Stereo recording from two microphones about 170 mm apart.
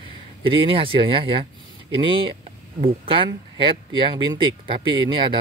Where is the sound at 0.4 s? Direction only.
30° right (ahead or behind).